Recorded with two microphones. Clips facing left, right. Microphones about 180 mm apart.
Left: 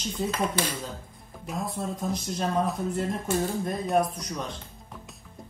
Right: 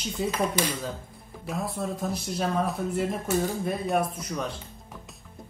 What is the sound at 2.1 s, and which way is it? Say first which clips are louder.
Speech: even; 5° right (ahead or behind).